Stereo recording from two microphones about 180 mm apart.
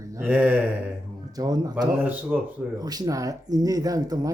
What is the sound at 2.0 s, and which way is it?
Speech, 10° right (ahead or behind).